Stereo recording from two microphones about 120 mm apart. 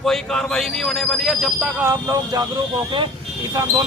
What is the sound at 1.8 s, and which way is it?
Speech, 30° right (ahead or behind).